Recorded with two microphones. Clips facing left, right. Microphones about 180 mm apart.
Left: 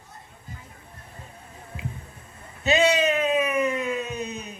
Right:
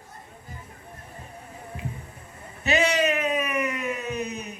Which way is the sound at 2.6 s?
25° left (ahead or behind).